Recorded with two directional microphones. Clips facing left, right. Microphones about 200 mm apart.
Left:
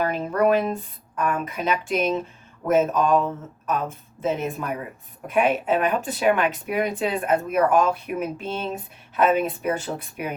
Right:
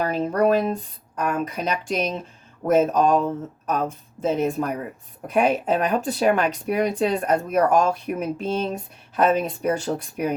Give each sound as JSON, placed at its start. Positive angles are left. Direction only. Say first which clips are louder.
{"t": 0.0, "sound": "speech", "louder": "right 1 dB", "side_deg": -35}